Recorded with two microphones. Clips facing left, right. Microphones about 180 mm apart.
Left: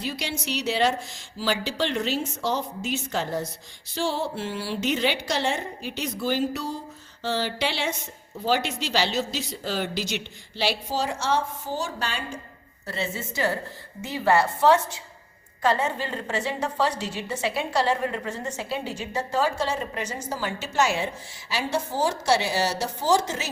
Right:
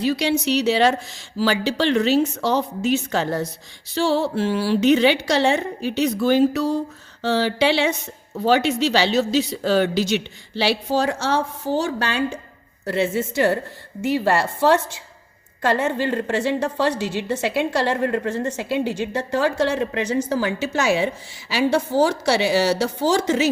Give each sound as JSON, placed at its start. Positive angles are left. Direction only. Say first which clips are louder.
{"t": 0.0, "sound": "a woman's voice", "louder": "right 11 dB", "side_deg": -70}
{"t": 12.9, "sound": "a woman's voice", "louder": "right 10 dB", "side_deg": -65}
{"t": 14.0, "sound": "a woman's voice", "louder": "right 3 dB", "side_deg": -80}
{"t": 21.5, "sound": "a woman's voice", "louder": "right 8 dB", "side_deg": -70}